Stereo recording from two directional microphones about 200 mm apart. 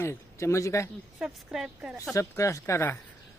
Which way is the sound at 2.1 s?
15° left (ahead or behind).